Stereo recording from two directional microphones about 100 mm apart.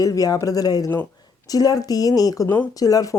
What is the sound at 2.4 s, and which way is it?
Speech, 20° left (ahead or behind).